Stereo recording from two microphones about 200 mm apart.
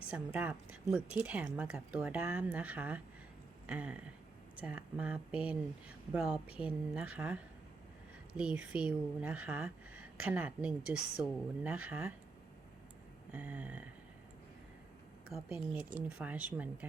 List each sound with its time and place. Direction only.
0.1 s speech: 5° right (ahead or behind)
13.3 s speech: 5° right (ahead or behind)
15.5 s speech: 10° right (ahead or behind)